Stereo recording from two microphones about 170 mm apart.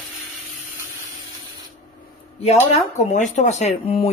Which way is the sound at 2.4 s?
40° left (ahead or behind).